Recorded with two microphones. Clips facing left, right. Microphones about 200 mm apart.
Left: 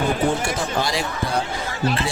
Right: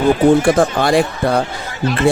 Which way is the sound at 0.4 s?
55° right (ahead or behind).